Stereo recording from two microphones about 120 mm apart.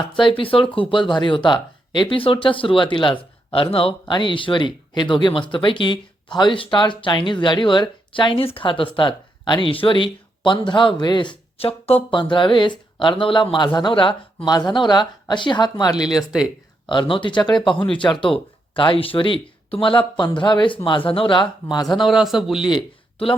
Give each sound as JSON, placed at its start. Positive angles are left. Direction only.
{"t": 0.2, "sound": "speech", "side_deg": 45}
{"t": 11.5, "sound": "speech", "side_deg": 55}
{"t": 16.0, "sound": "a man's voice", "side_deg": -5}
{"t": 16.9, "sound": "speech", "side_deg": 40}
{"t": 17.8, "sound": "speech", "side_deg": 10}
{"t": 18.7, "sound": "speech", "side_deg": 45}
{"t": 21.8, "sound": "a man's voice", "side_deg": 0}
{"t": 22.6, "sound": "speech", "side_deg": 45}